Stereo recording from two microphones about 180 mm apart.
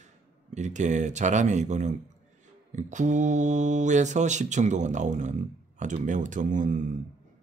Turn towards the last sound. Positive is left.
turn(degrees=-45)  # may be behind; listen again after turning